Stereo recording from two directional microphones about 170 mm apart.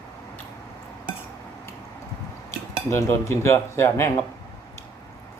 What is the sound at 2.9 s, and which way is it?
Speech, 15° left (ahead or behind).